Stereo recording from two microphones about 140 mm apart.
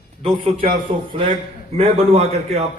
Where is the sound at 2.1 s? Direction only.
45° right (ahead or behind).